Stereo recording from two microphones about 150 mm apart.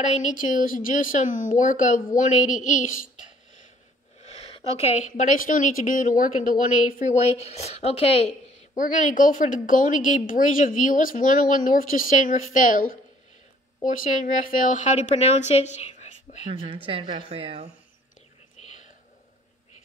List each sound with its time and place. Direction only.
0.0 s a woman's voice: 50° left (ahead or behind)
4.2 s a woman's voice: 45° left (ahead or behind)
8.7 s a woman's voice: 65° left (ahead or behind)
16.6 s speech: 35° right (ahead or behind)